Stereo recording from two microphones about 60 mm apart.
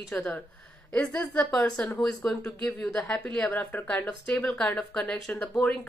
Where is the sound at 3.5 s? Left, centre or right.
Left.